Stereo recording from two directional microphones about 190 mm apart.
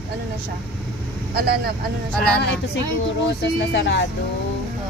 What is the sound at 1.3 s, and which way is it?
Speech, 55° right (ahead or behind).